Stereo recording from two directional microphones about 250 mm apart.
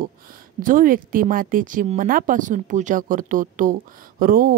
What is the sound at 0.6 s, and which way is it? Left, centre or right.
A woman's voice, right.